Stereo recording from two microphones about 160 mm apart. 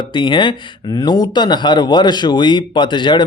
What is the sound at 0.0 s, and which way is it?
Speech, 30° left (ahead or behind).